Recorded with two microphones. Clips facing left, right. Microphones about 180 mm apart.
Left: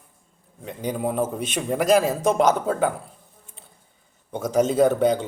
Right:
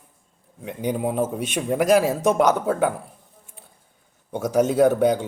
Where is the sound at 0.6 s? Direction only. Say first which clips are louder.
Right 2 dB; 15° right (ahead or behind).